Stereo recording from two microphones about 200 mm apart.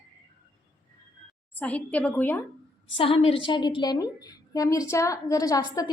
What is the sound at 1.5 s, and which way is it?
Speech, 5° left (ahead or behind).